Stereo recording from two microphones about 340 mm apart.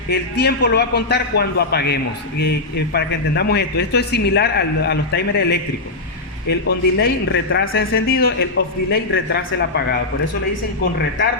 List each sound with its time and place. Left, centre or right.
0.1 s a man's voice: left